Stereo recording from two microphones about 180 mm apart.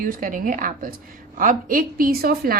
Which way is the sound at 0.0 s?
50° right (ahead or behind).